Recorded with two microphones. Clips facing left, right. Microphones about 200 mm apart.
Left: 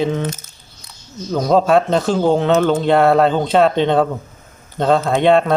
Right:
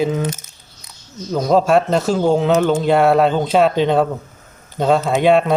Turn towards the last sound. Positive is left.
turn(degrees=-5)  # may be behind; listen again after turning